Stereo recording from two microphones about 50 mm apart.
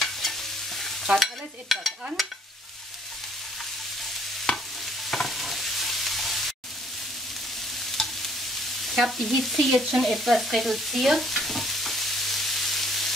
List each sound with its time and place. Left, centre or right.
0.0 s stir: centre
4.5 s stir: centre
5.1 s stir: centre
7.9 s stir: centre
8.9 s stir: centre
9.3 s stir: centre